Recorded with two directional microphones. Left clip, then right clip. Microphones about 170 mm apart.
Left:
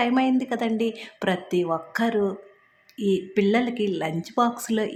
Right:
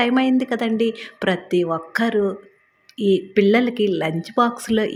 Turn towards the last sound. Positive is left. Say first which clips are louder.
# right 4 dB
turn(degrees=-20)  # may be behind; listen again after turning